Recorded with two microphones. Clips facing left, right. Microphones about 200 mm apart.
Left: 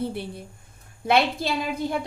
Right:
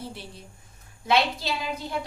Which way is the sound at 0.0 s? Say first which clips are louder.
Left 9 dB; 55° left (ahead or behind).